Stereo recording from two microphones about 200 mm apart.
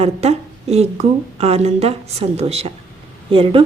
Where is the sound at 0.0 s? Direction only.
30° right (ahead or behind).